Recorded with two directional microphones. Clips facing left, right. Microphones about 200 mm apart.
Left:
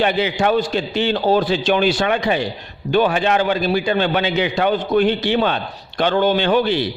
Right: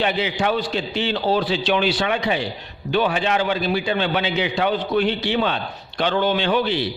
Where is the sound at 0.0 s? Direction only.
50° left (ahead or behind).